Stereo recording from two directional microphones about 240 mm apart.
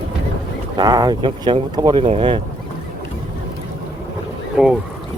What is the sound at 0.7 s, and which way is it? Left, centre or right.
Speech, centre.